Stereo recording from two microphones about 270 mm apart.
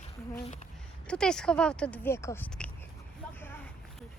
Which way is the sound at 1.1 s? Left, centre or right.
Centre.